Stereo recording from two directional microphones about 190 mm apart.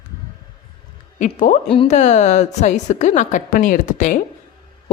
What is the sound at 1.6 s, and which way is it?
A woman's voice, 30° left (ahead or behind).